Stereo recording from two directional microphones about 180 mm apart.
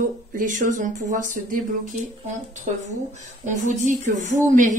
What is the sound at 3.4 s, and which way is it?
A woman's voice, 45° right (ahead or behind).